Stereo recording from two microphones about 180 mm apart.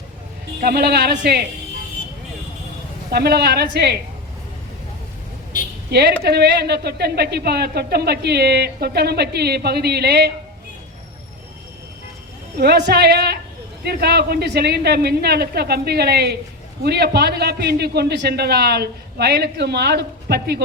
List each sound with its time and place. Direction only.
0.6 s speech: 60° right (ahead or behind)
3.1 s speech: 65° right (ahead or behind)
5.9 s speech: 65° right (ahead or behind)
12.5 s speech: 65° right (ahead or behind)